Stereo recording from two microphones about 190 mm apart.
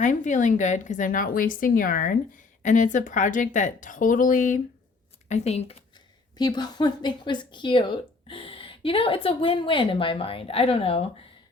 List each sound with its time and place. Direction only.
0.0 s a woman's voice: 40° left (ahead or behind)
6.3 s speech: 20° left (ahead or behind)